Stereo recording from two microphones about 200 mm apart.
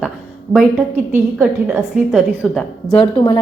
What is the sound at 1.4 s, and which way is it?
A woman's voice, 5° right (ahead or behind).